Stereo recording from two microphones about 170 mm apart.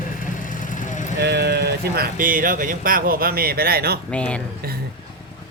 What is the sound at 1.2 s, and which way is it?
Speech, 75° right (ahead or behind).